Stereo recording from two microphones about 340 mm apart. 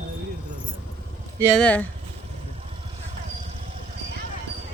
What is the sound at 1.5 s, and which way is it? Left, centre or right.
Speech, centre.